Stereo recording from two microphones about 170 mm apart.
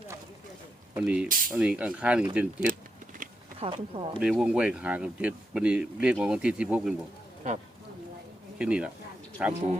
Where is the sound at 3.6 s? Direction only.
35° right (ahead or behind).